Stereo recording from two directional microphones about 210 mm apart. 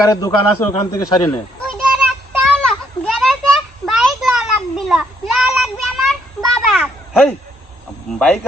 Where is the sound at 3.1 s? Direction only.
Centre (ahead or behind).